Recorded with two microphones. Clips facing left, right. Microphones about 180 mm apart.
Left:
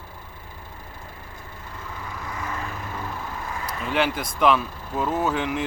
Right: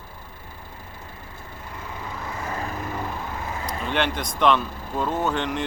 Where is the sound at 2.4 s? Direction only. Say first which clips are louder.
Right 2 dB; 30° right (ahead or behind).